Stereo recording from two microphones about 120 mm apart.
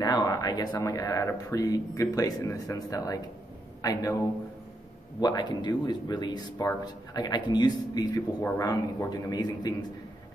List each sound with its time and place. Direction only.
0.0 s speech: 30° left (ahead or behind)
5.2 s speech: 35° left (ahead or behind)